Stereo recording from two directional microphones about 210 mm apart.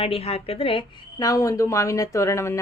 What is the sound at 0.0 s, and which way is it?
A woman's voice, 30° left (ahead or behind).